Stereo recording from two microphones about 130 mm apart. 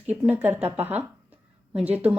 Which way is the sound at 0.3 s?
15° right (ahead or behind).